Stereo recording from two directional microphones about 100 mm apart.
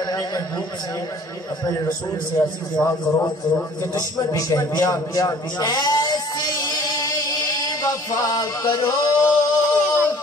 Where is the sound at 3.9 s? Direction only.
35° left (ahead or behind).